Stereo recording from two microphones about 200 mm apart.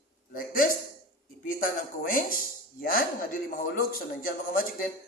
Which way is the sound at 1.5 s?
45° left (ahead or behind).